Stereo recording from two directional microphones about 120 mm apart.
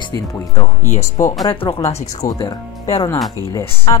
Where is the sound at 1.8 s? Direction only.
30° left (ahead or behind).